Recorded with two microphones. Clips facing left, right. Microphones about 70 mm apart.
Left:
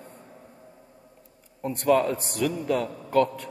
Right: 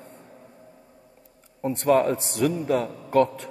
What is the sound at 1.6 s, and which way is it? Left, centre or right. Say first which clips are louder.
A man's voice: right 2 dB; right.